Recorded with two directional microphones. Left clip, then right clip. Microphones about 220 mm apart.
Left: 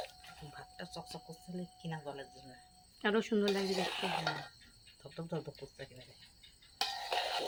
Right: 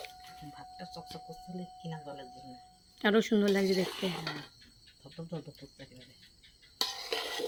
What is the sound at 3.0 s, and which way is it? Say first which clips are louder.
Speech: right 5 dB; 25° right (ahead or behind).